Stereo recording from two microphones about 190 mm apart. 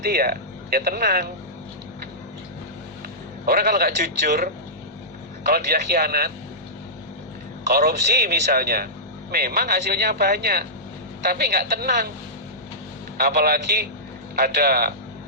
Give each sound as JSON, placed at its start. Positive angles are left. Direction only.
{"t": 0.0, "sound": "speech", "side_deg": -50}
{"t": 3.4, "sound": "speech", "side_deg": -55}
{"t": 5.5, "sound": "speech", "side_deg": -55}
{"t": 7.7, "sound": "a woman's voice", "side_deg": -55}
{"t": 13.1, "sound": "speech", "side_deg": -55}